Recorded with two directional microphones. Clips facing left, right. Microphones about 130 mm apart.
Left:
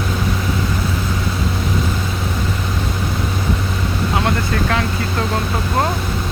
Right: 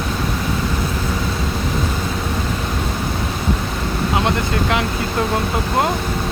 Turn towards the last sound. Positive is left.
turn(degrees=-20)  # may be behind; listen again after turning